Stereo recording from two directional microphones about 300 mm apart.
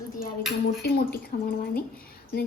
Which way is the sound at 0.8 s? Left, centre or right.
Left.